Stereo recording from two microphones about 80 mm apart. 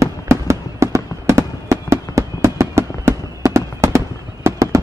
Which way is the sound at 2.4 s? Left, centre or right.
Right.